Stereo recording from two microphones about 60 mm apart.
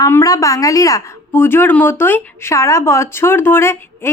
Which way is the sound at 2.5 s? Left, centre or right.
Left.